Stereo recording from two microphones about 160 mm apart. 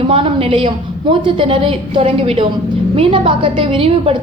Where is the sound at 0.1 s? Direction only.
35° right (ahead or behind).